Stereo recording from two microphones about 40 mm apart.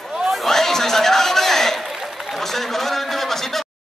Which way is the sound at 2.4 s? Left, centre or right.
Centre.